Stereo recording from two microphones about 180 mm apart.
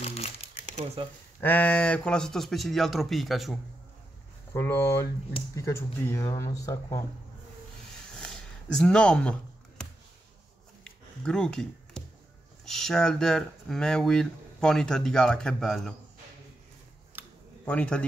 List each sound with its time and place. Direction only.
0.0 s crumpling: 35° left (ahead or behind)
1.4 s speech: 10° left (ahead or behind)
4.6 s speech: 15° left (ahead or behind)
8.1 s a sound: 5° left (ahead or behind)
12.6 s speech: centre (ahead or behind)
17.2 s a sound: 10° right (ahead or behind)
17.6 s speech: 5° left (ahead or behind)